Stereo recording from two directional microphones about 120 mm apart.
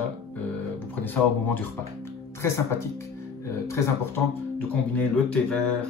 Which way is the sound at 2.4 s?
25° left (ahead or behind).